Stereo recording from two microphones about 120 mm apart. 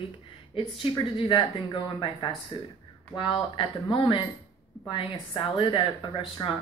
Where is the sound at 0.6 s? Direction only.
45° left (ahead or behind).